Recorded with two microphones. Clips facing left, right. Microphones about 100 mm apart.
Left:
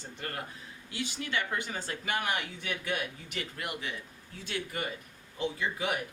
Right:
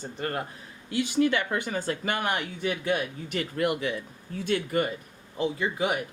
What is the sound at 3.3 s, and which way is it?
Speech, 55° right (ahead or behind).